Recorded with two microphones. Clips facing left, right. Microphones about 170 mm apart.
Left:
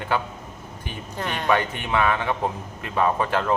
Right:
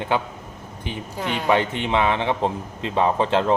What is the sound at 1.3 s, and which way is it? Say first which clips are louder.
Speech: right 2 dB; 15° right (ahead or behind).